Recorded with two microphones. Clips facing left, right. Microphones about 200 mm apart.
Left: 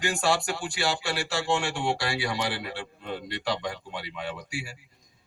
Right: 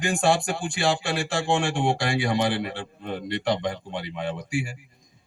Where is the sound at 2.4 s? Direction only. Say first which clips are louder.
Right 6 dB; 25° right (ahead or behind).